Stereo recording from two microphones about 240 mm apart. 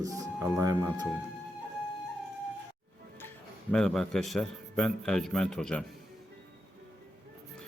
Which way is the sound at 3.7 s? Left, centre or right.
Centre.